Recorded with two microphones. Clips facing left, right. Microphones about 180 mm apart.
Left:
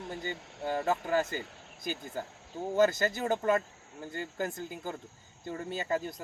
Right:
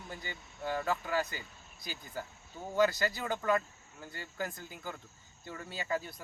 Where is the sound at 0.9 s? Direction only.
45° left (ahead or behind).